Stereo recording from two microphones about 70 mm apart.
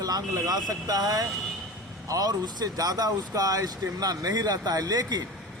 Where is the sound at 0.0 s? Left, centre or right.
Right.